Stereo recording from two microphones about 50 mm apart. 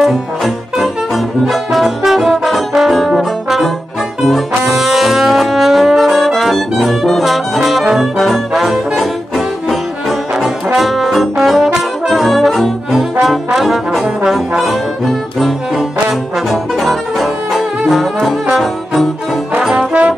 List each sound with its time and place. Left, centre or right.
0.7 s brass instrument: centre
19.6 s trombone: centre
19.9 s trombone: right